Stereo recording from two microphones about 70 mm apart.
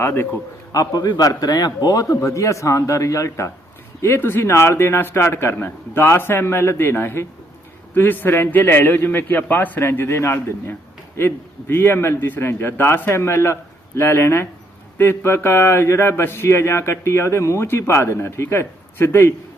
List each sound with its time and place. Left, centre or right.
0.0 s a man's voice: left
0.7 s a man's voice: left